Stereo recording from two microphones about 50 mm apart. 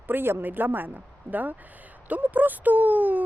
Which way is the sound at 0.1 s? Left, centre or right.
Right.